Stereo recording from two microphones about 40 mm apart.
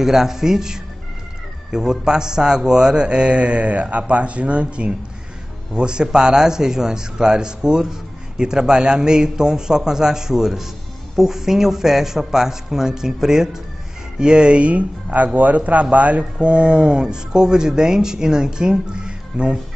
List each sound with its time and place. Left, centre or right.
0.0 s a man's voice: centre
14.3 s a man's voice: right